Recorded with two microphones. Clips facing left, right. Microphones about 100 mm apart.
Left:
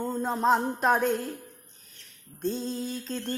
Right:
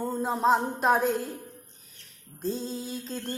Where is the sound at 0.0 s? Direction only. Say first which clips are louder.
Right 1 dB; 5° right (ahead or behind).